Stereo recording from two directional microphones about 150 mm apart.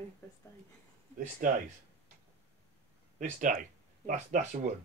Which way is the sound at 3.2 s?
55° right (ahead or behind).